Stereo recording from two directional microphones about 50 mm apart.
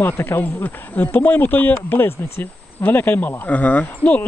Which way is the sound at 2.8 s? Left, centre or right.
Left.